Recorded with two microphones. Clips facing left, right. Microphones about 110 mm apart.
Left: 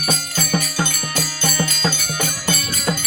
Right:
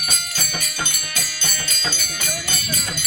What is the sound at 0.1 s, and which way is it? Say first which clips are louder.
Music: left 10 dB; 50° left (ahead or behind).